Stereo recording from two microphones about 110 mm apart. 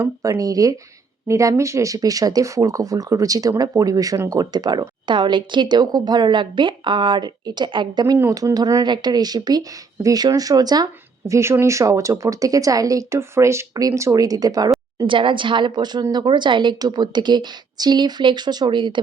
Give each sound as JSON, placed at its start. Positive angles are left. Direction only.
{"t": 0.0, "sound": "speech", "side_deg": -30}
{"t": 8.1, "sound": "speech", "side_deg": -30}
{"t": 11.3, "sound": "speech", "side_deg": -25}
{"t": 15.0, "sound": "a woman's voice", "side_deg": -50}